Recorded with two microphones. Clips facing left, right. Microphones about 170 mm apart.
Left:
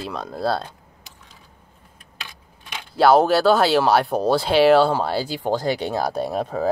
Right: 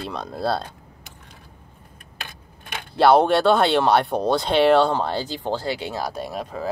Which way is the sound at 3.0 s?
Centre (ahead or behind).